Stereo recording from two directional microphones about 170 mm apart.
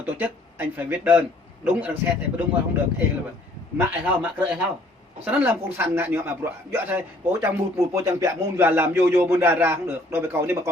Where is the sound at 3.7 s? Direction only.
10° right (ahead or behind).